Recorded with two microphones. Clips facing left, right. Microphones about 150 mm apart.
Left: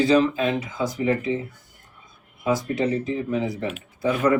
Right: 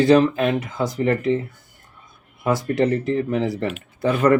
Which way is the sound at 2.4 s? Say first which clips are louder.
Right 3 dB; 65° right (ahead or behind).